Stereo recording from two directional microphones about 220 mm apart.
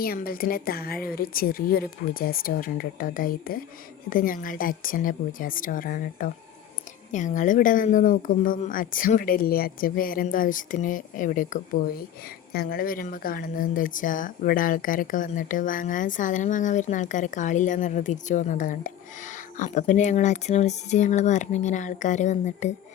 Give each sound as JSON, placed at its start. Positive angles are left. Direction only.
{"t": 0.0, "sound": "speech", "side_deg": 40}